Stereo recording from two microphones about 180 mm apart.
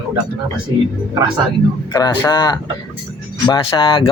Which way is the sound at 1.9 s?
20° left (ahead or behind).